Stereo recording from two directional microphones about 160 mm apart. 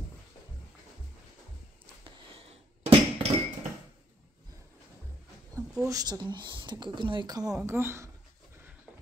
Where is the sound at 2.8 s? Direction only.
45° right (ahead or behind).